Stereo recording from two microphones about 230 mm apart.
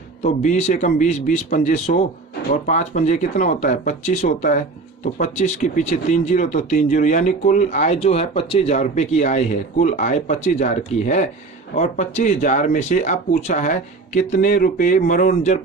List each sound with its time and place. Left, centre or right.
0.2 s speech: left